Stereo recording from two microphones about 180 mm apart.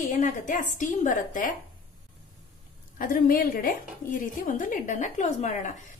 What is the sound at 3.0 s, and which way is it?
A woman's voice, 50° left (ahead or behind).